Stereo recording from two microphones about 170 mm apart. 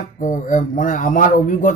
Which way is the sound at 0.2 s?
50° left (ahead or behind).